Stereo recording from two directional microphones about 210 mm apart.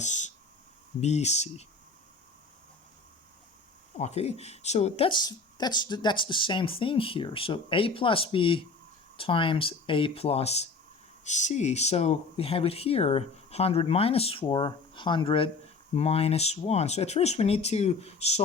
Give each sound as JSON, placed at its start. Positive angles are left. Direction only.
{"t": 0.0, "sound": "speech", "side_deg": 35}
{"t": 3.9, "sound": "speech", "side_deg": 30}